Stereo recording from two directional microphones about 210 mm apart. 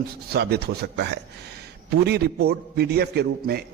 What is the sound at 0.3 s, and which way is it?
A man's voice, 50° right (ahead or behind).